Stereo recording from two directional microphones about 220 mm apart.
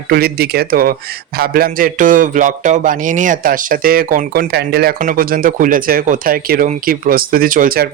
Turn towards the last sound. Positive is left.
turn(degrees=-40)  # may be behind; listen again after turning